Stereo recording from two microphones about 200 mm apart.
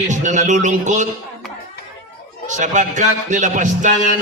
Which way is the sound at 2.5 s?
40° right (ahead or behind).